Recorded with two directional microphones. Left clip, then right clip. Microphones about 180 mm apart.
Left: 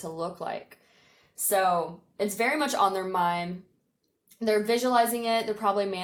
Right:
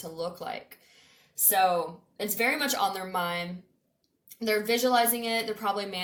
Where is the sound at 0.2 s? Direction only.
45° left (ahead or behind).